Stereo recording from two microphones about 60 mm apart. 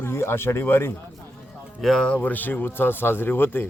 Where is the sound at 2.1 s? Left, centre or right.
Left.